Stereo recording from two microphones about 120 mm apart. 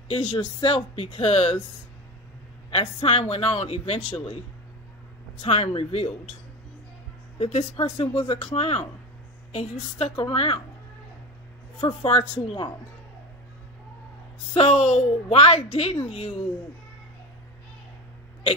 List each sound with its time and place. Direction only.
0.3 s a man's voice: 45° left (ahead or behind)
2.7 s a man's voice: 50° left (ahead or behind)
5.4 s a man's voice: 55° left (ahead or behind)
7.3 s a woman's voice: 65° left (ahead or behind)
7.7 s a man's voice: 50° left (ahead or behind)
10.3 s a man's voice: 45° left (ahead or behind)
11.8 s a man's voice: 45° left (ahead or behind)
14.5 s a man's voice: 55° left (ahead or behind)